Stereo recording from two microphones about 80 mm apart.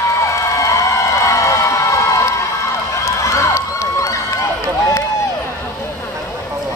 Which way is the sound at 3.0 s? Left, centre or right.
Left.